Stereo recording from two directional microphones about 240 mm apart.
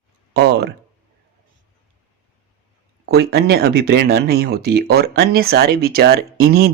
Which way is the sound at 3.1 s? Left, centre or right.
Right.